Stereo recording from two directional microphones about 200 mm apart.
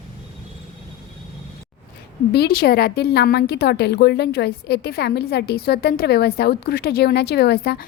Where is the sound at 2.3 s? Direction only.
50° left (ahead or behind).